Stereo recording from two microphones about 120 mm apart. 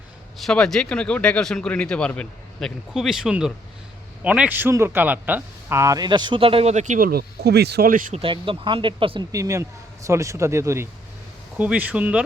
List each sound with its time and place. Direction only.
0.3 s speech: 5° left (ahead or behind); by 6.7 s 50° right (ahead or behind)
6.7 s speech: 90° right
8.2 s speech: 45° right (ahead or behind)
9.3 s speech: 25° right (ahead or behind)
11.5 s speech: 10° right (ahead or behind)